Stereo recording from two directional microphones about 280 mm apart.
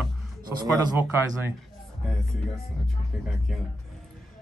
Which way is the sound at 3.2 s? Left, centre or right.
Centre.